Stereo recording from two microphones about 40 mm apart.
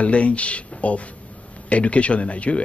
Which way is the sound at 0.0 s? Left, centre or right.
Left.